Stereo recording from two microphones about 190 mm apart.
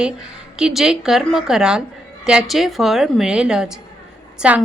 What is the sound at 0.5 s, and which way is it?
A woman's voice, 5° right (ahead or behind).